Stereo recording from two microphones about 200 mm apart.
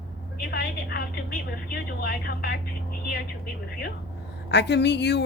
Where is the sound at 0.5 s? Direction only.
50° left (ahead or behind).